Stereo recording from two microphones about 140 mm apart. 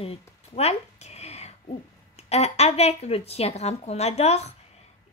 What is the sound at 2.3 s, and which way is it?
A woman's voice, 50° left (ahead or behind).